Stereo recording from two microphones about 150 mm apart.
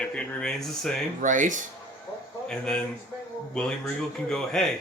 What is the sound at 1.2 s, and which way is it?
Speech, 60° right (ahead or behind).